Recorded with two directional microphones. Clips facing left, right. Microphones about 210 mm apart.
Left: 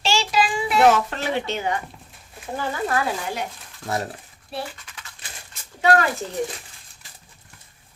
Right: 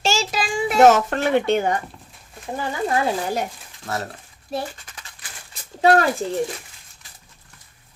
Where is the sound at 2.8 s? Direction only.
20° right (ahead or behind).